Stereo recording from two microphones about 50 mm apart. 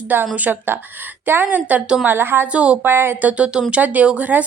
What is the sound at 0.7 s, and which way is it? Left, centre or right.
A woman's voice, right.